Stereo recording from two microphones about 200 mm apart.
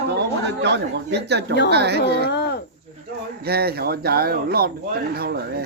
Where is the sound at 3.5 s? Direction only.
50° right (ahead or behind).